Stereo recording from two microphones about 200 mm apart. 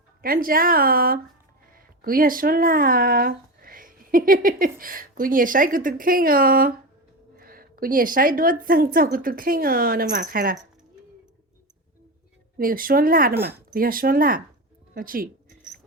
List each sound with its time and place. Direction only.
0.2 s speech: 45° right (ahead or behind)
12.5 s speech: 45° right (ahead or behind)
14.9 s a sound: 45° right (ahead or behind)